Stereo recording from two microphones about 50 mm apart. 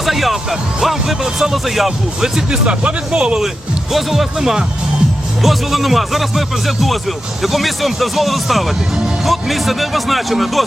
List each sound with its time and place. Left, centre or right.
0.0 s music: centre
0.8 s speech: centre